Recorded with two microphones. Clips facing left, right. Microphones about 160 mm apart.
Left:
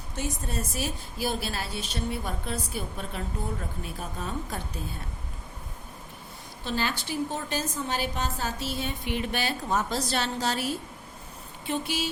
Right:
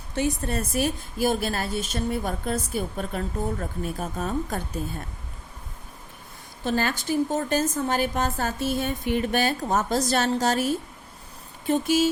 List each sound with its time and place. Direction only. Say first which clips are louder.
0.2 s a woman's voice: right 7 dB; 65° right (ahead or behind); by 4.6 s 50° right (ahead or behind)
6.7 s a woman's voice: right 5 dB; 50° right (ahead or behind)